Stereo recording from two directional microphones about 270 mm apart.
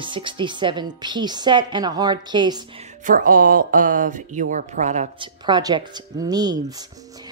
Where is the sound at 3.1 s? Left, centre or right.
Right.